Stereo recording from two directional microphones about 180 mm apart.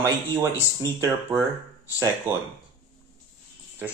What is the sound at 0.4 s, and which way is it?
Speech, 15° right (ahead or behind).